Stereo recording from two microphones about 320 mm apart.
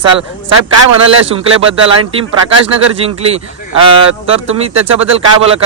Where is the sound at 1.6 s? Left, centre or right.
Centre.